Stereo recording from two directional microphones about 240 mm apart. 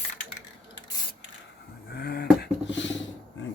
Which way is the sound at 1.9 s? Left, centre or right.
Left.